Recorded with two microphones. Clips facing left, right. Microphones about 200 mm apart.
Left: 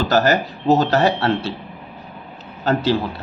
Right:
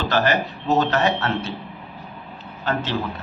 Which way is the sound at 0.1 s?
40° left (ahead or behind).